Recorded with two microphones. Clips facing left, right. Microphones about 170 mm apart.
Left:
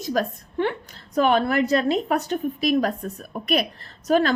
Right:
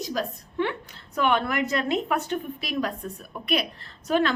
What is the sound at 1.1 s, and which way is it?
A woman's voice, 35° left (ahead or behind).